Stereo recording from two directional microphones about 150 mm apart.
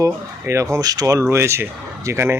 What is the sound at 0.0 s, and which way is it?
Speech, 20° right (ahead or behind).